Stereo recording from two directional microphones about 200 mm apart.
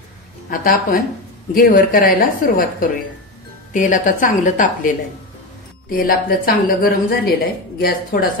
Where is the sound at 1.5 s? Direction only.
45° left (ahead or behind).